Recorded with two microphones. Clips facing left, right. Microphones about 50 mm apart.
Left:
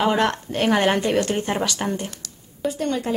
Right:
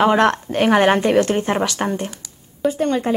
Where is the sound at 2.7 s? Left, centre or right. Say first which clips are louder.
Right 4 dB; right.